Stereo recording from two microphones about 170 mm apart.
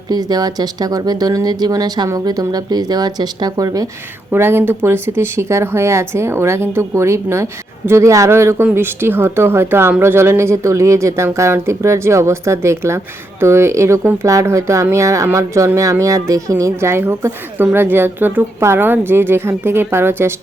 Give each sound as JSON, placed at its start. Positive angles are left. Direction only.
{"t": 0.1, "sound": "speech", "side_deg": -25}